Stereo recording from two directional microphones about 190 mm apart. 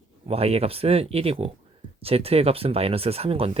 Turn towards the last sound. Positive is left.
turn(degrees=-30)  # may be behind; listen again after turning